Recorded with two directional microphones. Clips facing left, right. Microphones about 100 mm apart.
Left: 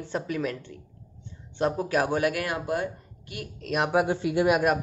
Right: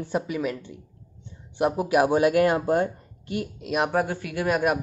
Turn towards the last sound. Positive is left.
turn(degrees=20)  # may be behind; listen again after turning